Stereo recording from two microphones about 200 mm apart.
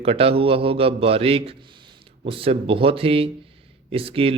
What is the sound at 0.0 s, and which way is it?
Speech, 30° right (ahead or behind).